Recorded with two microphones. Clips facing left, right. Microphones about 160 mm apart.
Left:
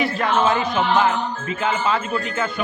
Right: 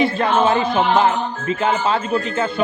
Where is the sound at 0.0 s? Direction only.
25° right (ahead or behind).